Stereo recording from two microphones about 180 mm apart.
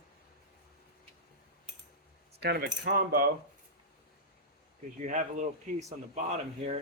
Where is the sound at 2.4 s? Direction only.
65° right (ahead or behind).